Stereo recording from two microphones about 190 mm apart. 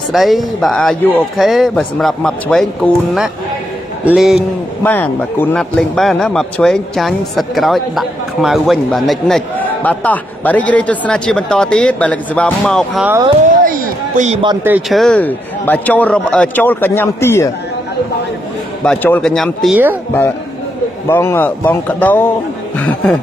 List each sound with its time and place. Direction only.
0.1 s speech: centre (ahead or behind)
4.8 s speech: 10° left (ahead or behind)
13.5 s a sound: 45° right (ahead or behind)
14.9 s a man's voice: centre (ahead or behind)
18.9 s speech: 5° left (ahead or behind)
21.1 s a man's voice: 10° left (ahead or behind)
22.8 s chuckle: 5° left (ahead or behind)